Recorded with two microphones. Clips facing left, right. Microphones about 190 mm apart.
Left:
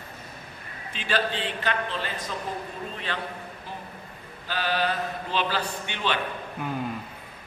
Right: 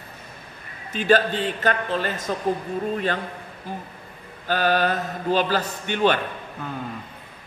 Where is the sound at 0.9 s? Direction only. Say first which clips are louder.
Right 8 dB; 45° right (ahead or behind).